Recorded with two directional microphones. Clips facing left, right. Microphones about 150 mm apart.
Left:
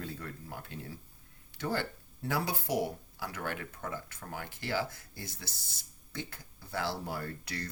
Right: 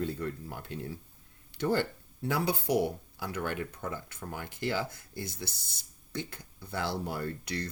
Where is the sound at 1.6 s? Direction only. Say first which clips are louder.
Right 5 dB; 20° right (ahead or behind).